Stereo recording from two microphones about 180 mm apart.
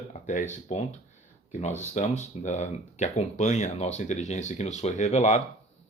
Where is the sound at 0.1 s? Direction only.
40° left (ahead or behind).